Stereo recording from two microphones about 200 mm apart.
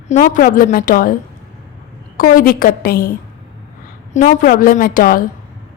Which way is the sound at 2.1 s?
45° left (ahead or behind).